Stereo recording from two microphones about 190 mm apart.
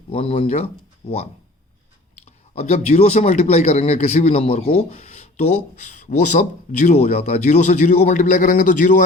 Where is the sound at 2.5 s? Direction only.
35° left (ahead or behind).